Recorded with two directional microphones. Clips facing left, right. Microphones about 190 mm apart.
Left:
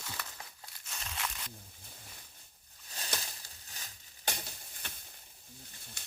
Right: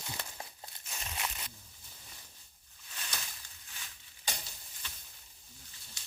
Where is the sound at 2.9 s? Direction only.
35° left (ahead or behind).